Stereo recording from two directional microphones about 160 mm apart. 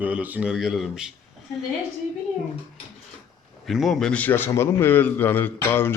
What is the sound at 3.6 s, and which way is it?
A man's voice, centre (ahead or behind).